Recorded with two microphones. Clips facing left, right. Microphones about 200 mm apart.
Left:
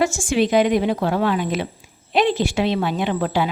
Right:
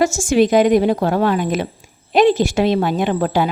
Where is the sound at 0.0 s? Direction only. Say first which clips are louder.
Right 4 dB; 45° right (ahead or behind).